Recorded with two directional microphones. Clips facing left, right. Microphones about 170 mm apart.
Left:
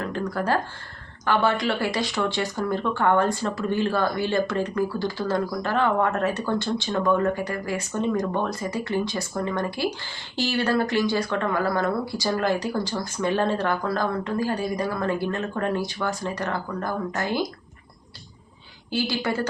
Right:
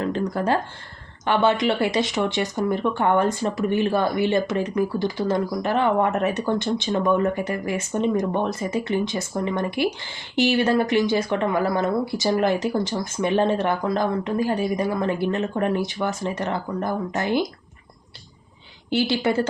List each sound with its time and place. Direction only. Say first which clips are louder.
0.0 s speech: right 3 dB; 20° right (ahead or behind)
18.9 s speech: right 4 dB; 25° right (ahead or behind)